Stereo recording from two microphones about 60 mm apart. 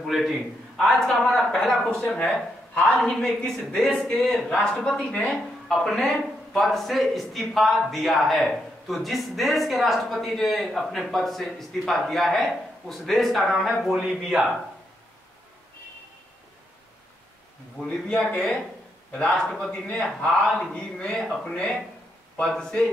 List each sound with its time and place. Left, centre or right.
0.0 s speech: centre
2.9 s speech: centre
17.8 s a man's voice: centre